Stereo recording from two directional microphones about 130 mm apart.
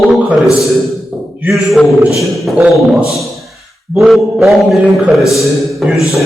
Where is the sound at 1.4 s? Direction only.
Centre (ahead or behind).